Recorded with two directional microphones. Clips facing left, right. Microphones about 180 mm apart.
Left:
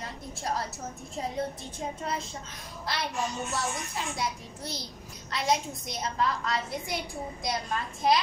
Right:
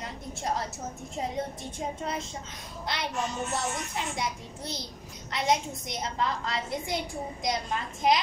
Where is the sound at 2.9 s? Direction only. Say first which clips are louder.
Left 1 dB; 20° right (ahead or behind).